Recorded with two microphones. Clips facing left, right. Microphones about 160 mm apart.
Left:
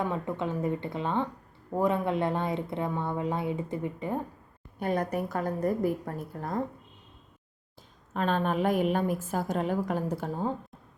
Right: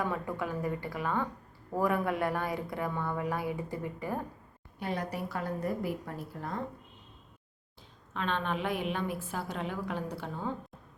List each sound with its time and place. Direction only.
0.0 s speech: 25° left (ahead or behind)
4.8 s a woman's voice: 50° left (ahead or behind)
8.1 s a woman's voice: 40° left (ahead or behind)